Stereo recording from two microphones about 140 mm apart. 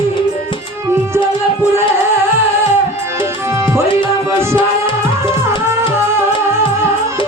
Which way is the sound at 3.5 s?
20° right (ahead or behind).